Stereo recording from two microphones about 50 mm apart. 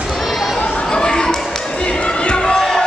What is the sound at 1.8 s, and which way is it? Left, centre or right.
Crowd, left.